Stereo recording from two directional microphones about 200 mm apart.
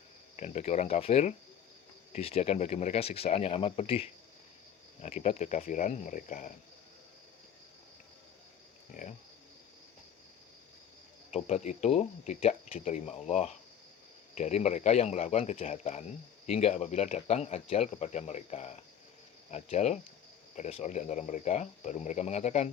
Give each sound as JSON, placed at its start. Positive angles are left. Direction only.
{"t": 0.3, "sound": "speech", "side_deg": 35}
{"t": 8.9, "sound": "speech", "side_deg": 40}
{"t": 11.3, "sound": "speech", "side_deg": 35}